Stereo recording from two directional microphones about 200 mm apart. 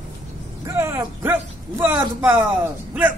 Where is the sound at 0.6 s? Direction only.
10° right (ahead or behind).